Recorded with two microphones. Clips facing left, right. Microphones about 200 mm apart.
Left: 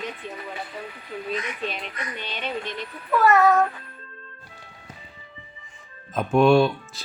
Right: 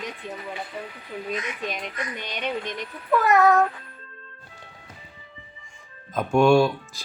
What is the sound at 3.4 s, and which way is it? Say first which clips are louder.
Speech: right 3 dB; centre (ahead or behind).